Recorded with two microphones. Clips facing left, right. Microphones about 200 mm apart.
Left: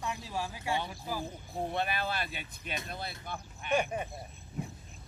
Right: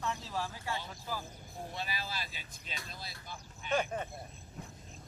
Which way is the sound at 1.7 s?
60° left (ahead or behind).